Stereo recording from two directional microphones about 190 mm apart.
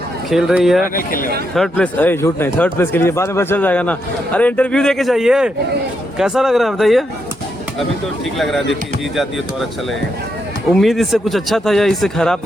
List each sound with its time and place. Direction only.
0.3 s speech: centre (ahead or behind)
0.9 s speech: 50° left (ahead or behind)
1.5 s speech: 5° left (ahead or behind)
10.7 s speech: centre (ahead or behind)